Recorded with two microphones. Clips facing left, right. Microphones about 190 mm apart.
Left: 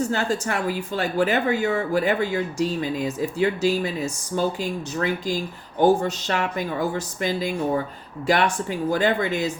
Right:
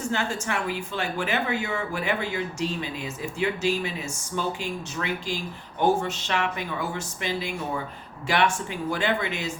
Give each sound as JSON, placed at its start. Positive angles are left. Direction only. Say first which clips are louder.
{"t": 0.1, "sound": "speech", "louder": "left 4 dB", "side_deg": 40}